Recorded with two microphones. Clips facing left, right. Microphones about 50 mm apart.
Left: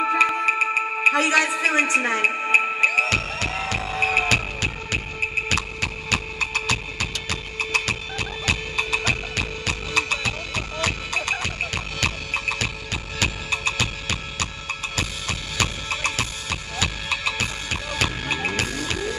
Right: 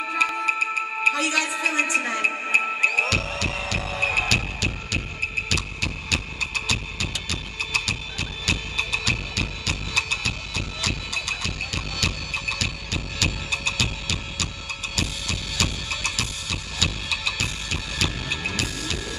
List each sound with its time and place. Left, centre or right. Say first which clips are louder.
0.0 s music: left 4 dB; left
1.5 s a woman's voice: left 3 dB; left
2.8 s music: left 2 dB; left
3.7 s music: left 3 dB; centre
5.5 s a sound: left 2 dB; left
6.4 s music: left 3 dB; centre
7.0 s music: left 2 dB; left